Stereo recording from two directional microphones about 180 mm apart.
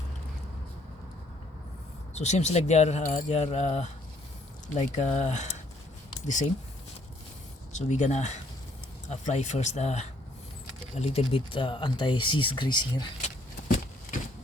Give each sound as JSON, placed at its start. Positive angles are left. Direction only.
{"t": 2.1, "sound": "speech", "side_deg": 40}
{"t": 7.7, "sound": "speech", "side_deg": 40}
{"t": 13.2, "sound": "vehicle", "side_deg": 45}